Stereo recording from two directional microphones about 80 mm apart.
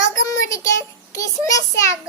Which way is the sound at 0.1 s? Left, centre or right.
Left.